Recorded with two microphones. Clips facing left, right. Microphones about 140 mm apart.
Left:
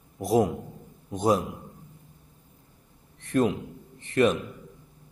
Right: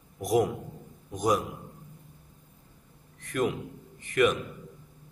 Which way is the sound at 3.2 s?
30° left (ahead or behind).